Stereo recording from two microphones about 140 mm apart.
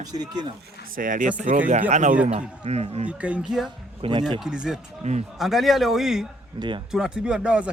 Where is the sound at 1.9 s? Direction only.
60° right (ahead or behind).